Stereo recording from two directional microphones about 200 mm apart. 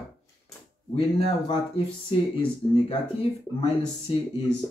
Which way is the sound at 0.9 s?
30° left (ahead or behind).